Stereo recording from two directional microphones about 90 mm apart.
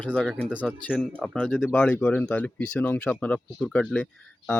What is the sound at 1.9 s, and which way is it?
Speech, 20° left (ahead or behind).